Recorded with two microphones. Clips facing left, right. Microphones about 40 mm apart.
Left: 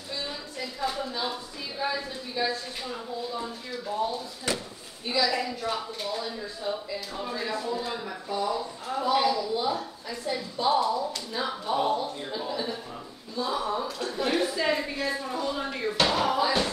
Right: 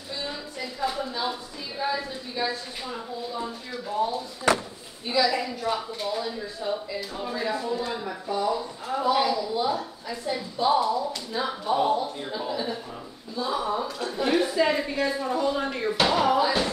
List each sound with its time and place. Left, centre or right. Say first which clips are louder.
0.2 s a sound: right 3 dB; centre
1.8 s a woman's voice: right 2 dB; centre
4.5 s speech: right 8 dB; right
5.0 s a woman's voice: right 2 dB; centre